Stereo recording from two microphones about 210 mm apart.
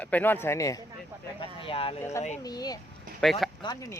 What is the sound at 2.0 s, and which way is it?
Speech, 15° left (ahead or behind).